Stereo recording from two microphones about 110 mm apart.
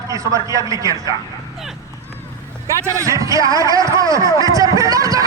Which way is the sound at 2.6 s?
25° right (ahead or behind).